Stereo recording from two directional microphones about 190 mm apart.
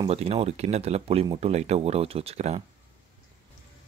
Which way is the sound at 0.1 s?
30° right (ahead or behind).